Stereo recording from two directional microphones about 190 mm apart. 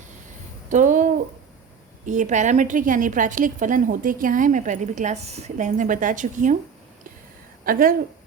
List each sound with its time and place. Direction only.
0.7 s a woman's voice: 40° right (ahead or behind)
7.6 s speech: 50° right (ahead or behind)